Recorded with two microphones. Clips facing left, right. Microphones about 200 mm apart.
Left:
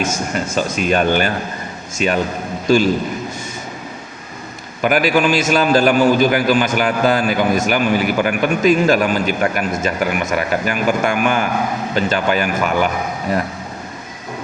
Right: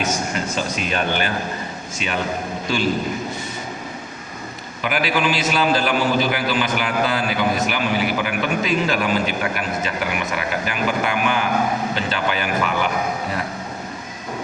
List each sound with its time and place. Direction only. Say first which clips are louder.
0.0 s a man's voice: left 3 dB; 45° left (ahead or behind)
4.8 s a man's voice: left 6 dB; 45° left (ahead or behind)